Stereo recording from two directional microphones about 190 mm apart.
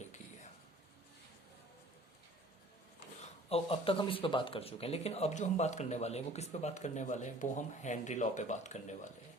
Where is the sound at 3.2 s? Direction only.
30° left (ahead or behind).